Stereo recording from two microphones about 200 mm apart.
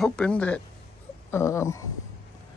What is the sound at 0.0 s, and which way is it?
Speech, 5° left (ahead or behind).